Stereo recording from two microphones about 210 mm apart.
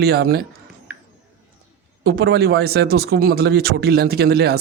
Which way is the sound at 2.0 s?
50° right (ahead or behind).